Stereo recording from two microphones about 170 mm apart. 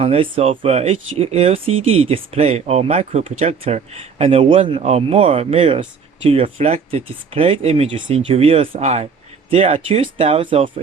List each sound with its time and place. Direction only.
0.0 s speech: 35° right (ahead or behind)